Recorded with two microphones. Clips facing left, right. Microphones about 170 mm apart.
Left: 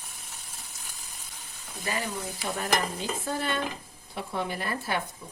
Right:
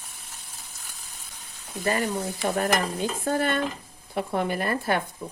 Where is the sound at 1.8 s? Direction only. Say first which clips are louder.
Right 7 dB; 50° right (ahead or behind).